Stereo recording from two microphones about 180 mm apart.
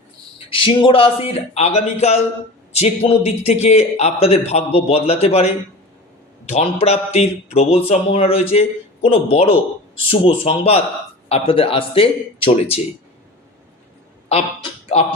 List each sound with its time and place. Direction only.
0.3 s a man's voice: 30° left (ahead or behind)
14.3 s speech: 30° left (ahead or behind)